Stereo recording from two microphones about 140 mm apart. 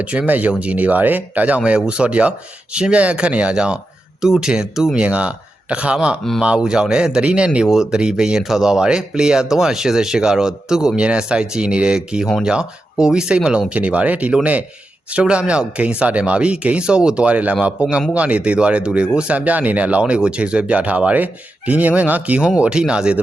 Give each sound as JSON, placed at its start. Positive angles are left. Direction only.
{"t": 0.0, "sound": "speech", "side_deg": -10}